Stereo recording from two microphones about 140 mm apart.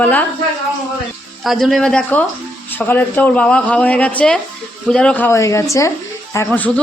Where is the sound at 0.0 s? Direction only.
10° left (ahead or behind).